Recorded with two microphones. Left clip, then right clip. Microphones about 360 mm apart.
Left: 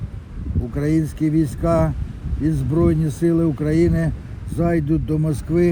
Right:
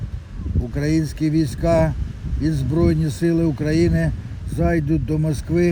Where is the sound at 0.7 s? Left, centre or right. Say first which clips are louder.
Left 1 dB; right.